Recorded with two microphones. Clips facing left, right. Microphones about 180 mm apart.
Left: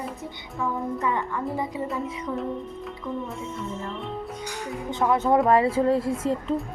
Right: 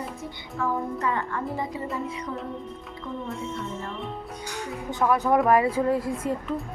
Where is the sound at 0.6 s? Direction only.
15° left (ahead or behind).